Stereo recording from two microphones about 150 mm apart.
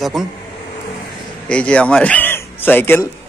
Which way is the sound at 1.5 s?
10° left (ahead or behind).